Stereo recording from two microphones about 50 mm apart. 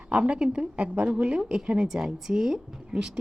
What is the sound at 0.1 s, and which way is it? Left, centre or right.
A woman's voice, centre.